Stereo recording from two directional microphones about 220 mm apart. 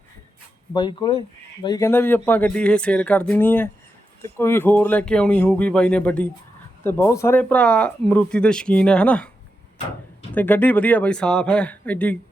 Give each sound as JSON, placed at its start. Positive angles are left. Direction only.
{"t": 0.7, "sound": "speech", "side_deg": 20}
{"t": 10.3, "sound": "speech", "side_deg": 10}